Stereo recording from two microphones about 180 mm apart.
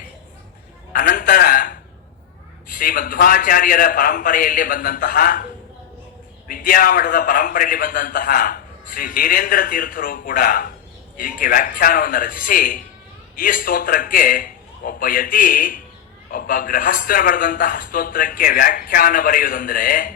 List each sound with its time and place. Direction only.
0.9 s a sound: 50° left (ahead or behind)
2.6 s a man's voice: 50° left (ahead or behind)
6.5 s a man's voice: 50° left (ahead or behind)